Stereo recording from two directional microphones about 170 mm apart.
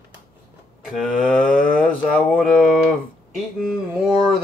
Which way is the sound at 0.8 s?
Centre (ahead or behind).